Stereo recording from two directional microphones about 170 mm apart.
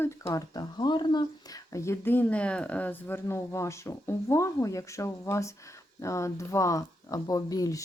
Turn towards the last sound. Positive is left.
turn(degrees=20)  # may be behind; listen again after turning